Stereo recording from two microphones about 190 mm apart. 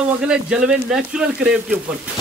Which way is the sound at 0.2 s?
5° right (ahead or behind).